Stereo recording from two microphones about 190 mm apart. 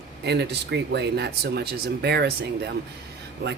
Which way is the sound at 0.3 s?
60° right (ahead or behind).